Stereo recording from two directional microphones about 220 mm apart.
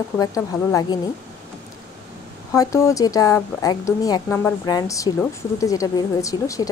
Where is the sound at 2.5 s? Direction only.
15° left (ahead or behind).